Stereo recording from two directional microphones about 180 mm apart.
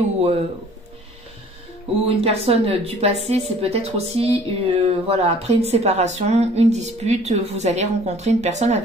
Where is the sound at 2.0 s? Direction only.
35° right (ahead or behind).